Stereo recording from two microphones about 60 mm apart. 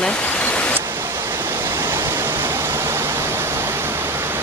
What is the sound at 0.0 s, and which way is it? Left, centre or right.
Pink noise, left.